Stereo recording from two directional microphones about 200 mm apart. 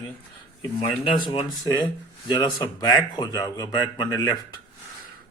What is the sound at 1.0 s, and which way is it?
Speech, 25° left (ahead or behind).